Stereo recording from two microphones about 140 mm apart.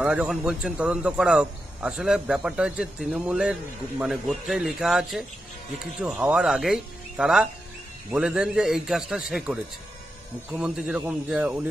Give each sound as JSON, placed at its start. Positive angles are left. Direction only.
{"t": 0.0, "sound": "a man's voice", "side_deg": -5}